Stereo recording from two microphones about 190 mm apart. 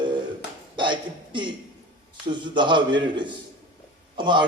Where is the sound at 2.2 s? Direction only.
25° right (ahead or behind).